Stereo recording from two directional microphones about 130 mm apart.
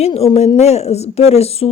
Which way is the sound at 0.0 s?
50° left (ahead or behind).